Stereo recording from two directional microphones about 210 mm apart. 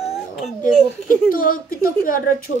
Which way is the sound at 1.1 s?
40° left (ahead or behind).